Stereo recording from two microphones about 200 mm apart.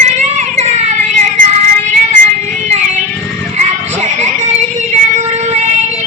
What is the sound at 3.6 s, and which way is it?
Music, 35° right (ahead or behind).